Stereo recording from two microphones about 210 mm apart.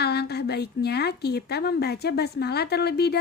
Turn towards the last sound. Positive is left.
turn(degrees=50)  # may be behind; listen again after turning